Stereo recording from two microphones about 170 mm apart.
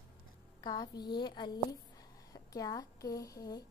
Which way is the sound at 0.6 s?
25° left (ahead or behind).